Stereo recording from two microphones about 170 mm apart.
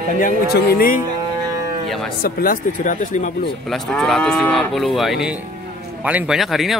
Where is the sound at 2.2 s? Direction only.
60° left (ahead or behind).